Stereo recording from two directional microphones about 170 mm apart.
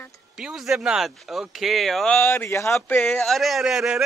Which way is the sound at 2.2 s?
15° left (ahead or behind).